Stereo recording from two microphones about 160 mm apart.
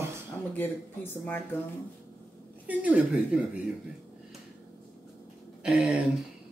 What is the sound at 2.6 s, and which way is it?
Speech, 10° right (ahead or behind).